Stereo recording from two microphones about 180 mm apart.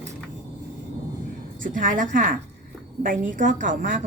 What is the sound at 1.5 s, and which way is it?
A woman's voice, 50° right (ahead or behind).